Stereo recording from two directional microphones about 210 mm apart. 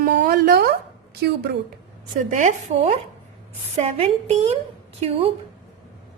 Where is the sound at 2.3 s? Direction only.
35° right (ahead or behind).